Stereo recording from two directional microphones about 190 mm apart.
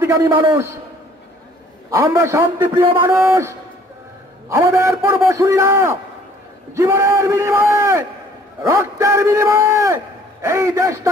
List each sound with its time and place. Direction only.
0.0 s a man's voice: 15° right (ahead or behind)
1.9 s a man's voice: 15° right (ahead or behind)